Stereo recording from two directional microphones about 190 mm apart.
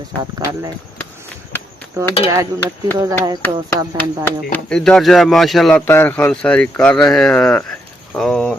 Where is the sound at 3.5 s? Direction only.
20° right (ahead or behind).